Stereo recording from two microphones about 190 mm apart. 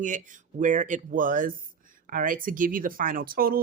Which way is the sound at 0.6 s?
40° right (ahead or behind).